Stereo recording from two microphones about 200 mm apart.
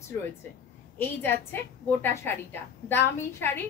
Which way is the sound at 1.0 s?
10° left (ahead or behind).